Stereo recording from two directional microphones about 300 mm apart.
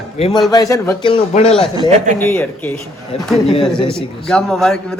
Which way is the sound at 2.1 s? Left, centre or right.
Centre.